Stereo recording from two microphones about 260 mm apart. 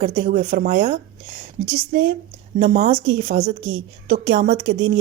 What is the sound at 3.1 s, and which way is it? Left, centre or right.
Speech, right.